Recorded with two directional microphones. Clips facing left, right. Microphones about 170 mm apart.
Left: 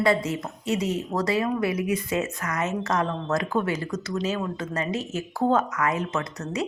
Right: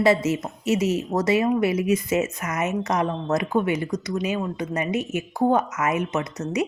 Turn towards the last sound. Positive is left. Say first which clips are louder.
# right 3 dB
turn(degrees=-20)  # may be behind; listen again after turning